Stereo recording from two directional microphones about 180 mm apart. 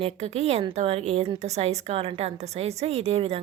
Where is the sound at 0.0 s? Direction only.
35° right (ahead or behind).